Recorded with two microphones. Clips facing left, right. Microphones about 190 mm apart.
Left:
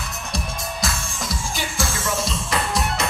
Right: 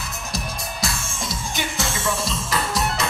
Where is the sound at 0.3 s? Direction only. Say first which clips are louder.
Left 1 dB; centre (ahead or behind).